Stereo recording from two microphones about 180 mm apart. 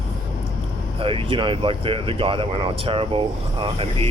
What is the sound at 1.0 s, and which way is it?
Speech, 30° right (ahead or behind).